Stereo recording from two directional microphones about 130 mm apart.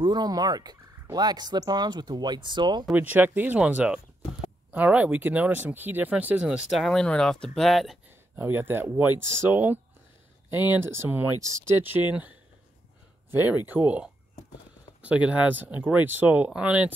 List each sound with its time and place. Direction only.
0.0 s speech: 30° right (ahead or behind)
2.9 s speech: 15° right (ahead or behind)
8.4 s speech: 15° right (ahead or behind)